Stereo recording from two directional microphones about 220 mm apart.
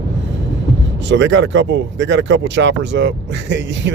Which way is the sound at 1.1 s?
55° right (ahead or behind).